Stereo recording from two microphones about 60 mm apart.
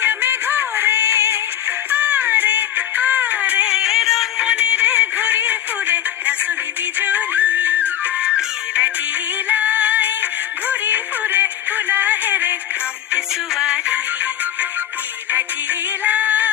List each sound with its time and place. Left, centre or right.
0.0 s music: right
0.9 s synthetic singing: right
1.9 s music: right; by 4.4 s centre
4.4 s music: right
8.2 s music: centre
13.5 s music: centre
16.0 s music: right